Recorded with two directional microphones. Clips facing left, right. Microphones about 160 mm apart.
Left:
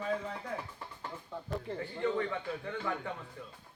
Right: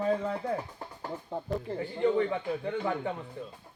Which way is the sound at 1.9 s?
20° right (ahead or behind).